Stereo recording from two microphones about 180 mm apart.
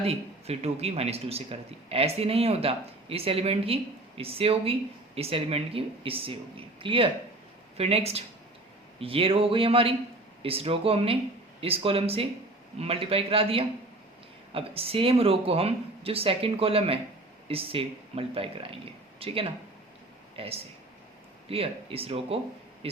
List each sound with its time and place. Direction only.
0.0 s speech: 35° right (ahead or behind)